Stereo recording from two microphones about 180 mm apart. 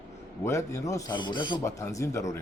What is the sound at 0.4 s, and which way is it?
Speech, 15° left (ahead or behind).